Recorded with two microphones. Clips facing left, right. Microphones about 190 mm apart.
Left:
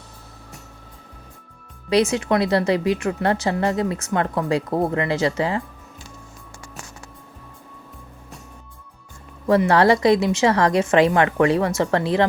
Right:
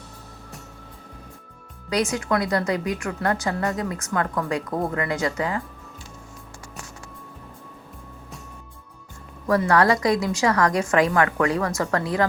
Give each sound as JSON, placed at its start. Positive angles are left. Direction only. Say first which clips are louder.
{"t": 1.9, "sound": "a woman's voice", "louder": "left 5 dB", "side_deg": 25}
{"t": 9.5, "sound": "a woman's voice", "louder": "left 3 dB", "side_deg": 25}